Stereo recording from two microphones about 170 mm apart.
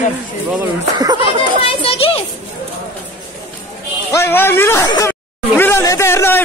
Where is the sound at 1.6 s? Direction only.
35° left (ahead or behind).